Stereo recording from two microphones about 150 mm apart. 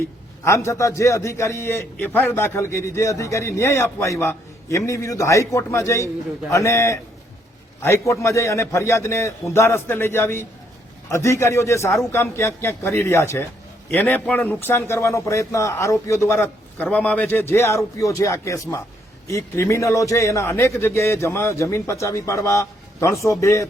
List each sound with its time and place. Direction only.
0.4 s a man's voice: 20° left (ahead or behind)